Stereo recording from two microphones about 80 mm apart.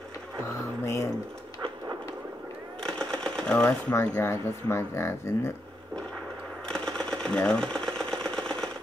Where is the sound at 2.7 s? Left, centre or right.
Centre.